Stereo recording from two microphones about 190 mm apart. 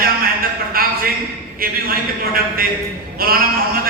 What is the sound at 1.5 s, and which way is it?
A man's voice, 50° right (ahead or behind).